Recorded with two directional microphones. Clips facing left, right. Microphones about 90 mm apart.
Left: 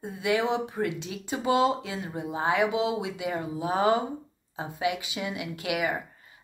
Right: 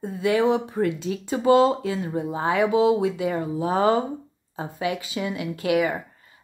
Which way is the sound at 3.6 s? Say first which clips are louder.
Right 4 dB; 50° right (ahead or behind).